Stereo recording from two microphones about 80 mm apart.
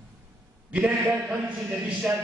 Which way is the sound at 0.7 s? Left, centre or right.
Centre.